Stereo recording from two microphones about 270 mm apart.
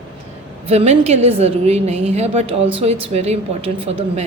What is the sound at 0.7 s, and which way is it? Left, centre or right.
A woman's voice, right.